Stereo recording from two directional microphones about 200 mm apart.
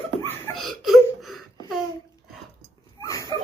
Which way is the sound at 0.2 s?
10° left (ahead or behind).